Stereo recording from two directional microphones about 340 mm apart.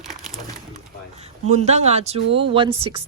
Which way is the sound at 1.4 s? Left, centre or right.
Centre.